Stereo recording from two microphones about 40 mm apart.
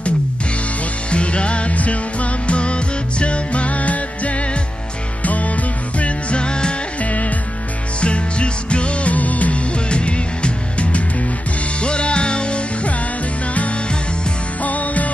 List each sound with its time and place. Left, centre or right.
1.1 s music: left
7.0 s music: left
8.0 s music: left
9.8 s music: left
14.6 s music: left